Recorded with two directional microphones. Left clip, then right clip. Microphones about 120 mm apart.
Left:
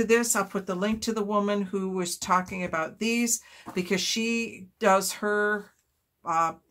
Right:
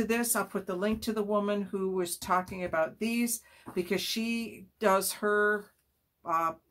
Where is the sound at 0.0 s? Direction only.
25° left (ahead or behind).